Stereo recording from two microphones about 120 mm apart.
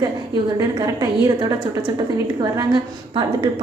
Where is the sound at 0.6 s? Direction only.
30° right (ahead or behind).